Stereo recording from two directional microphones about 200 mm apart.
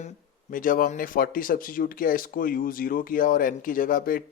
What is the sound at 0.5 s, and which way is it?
Speech, 45° left (ahead or behind).